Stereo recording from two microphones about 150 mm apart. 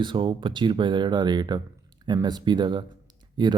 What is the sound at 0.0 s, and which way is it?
Speech, 35° right (ahead or behind).